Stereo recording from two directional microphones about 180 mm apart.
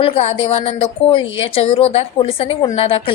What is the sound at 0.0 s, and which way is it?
A woman's voice, 35° left (ahead or behind).